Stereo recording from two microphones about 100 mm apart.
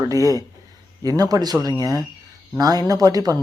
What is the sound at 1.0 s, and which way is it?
Speech, 40° right (ahead or behind).